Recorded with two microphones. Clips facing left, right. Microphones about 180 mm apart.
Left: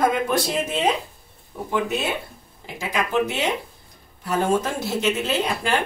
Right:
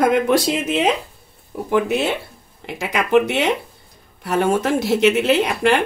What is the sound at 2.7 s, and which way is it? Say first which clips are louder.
Speech: right 6 dB; 75° right (ahead or behind).